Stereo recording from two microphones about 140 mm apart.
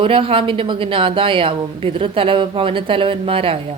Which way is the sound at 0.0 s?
40° right (ahead or behind).